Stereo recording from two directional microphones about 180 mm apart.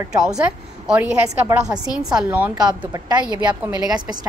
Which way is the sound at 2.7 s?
25° right (ahead or behind).